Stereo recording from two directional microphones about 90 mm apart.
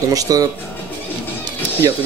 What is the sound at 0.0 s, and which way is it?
Speech, 40° right (ahead or behind).